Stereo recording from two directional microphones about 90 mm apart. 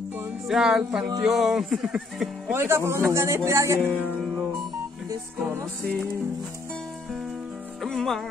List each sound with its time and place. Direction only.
0.5 s music: 5° right (ahead or behind)
1.2 s speech: 5° right (ahead or behind)
2.5 s speech: 30° right (ahead or behind)
3.8 s music: 15° left (ahead or behind)
7.8 s speech: 5° left (ahead or behind)